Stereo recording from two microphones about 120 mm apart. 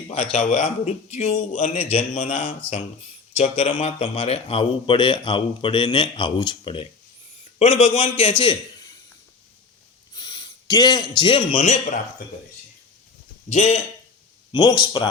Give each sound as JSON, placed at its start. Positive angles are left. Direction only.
{"t": 0.1, "sound": "a man's voice", "side_deg": 60}
{"t": 3.3, "sound": "a man's voice", "side_deg": 60}
{"t": 7.6, "sound": "a man's voice", "side_deg": 60}
{"t": 10.2, "sound": "a sound", "side_deg": 35}
{"t": 11.2, "sound": "a man's voice", "side_deg": 45}
{"t": 11.5, "sound": "speech", "side_deg": 80}
{"t": 13.5, "sound": "a man's voice", "side_deg": 75}
{"t": 14.5, "sound": "speech", "side_deg": 35}